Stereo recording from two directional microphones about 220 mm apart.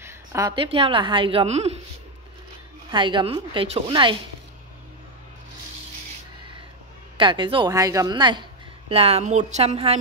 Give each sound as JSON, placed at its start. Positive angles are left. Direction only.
{"t": 0.0, "sound": "a woman's voice", "side_deg": -15}
{"t": 2.9, "sound": "a woman's voice", "side_deg": -20}
{"t": 7.2, "sound": "a woman's voice", "side_deg": -20}